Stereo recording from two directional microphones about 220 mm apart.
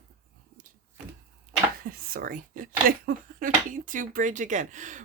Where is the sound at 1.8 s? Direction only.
40° right (ahead or behind).